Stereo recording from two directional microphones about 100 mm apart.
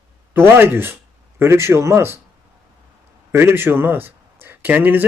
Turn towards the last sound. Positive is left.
turn(degrees=-20)  # may be behind; listen again after turning